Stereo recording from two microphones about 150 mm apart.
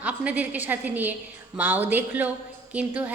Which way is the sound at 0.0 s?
10° right (ahead or behind).